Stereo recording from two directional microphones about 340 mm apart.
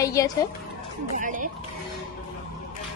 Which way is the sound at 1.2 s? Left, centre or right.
Right.